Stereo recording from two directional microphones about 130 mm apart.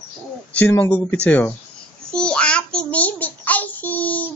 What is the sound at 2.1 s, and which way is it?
Child singing, 10° left (ahead or behind).